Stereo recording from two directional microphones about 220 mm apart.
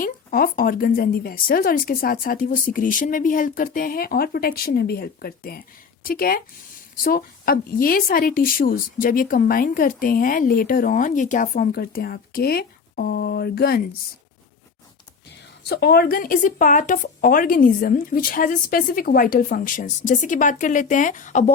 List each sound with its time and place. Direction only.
0.0 s a woman's voice: 40° left (ahead or behind)
15.7 s a woman's voice: 45° left (ahead or behind)